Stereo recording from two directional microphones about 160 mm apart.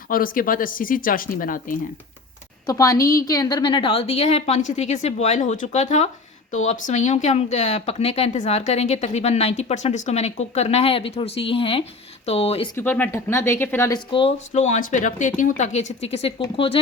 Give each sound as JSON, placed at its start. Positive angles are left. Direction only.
{"t": 0.1, "sound": "speech", "side_deg": 60}
{"t": 2.6, "sound": "a woman's voice", "side_deg": 20}
{"t": 12.7, "sound": "speech", "side_deg": 10}
{"t": 14.1, "sound": "a woman's voice", "side_deg": 35}